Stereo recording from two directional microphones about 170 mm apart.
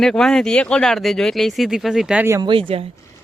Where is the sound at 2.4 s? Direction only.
30° right (ahead or behind).